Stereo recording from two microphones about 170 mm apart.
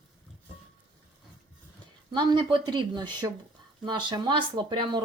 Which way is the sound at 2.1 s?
25° right (ahead or behind).